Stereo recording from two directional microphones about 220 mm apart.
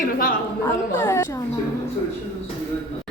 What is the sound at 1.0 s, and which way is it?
Speech, 10° left (ahead or behind).